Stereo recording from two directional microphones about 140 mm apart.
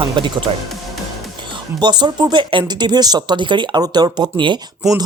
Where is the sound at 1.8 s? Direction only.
30° right (ahead or behind).